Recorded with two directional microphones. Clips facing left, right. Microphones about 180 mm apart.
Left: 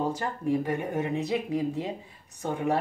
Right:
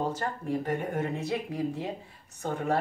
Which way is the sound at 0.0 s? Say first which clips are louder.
Left 2 dB; 10° left (ahead or behind).